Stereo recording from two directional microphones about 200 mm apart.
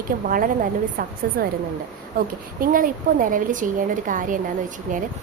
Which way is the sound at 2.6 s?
45° right (ahead or behind).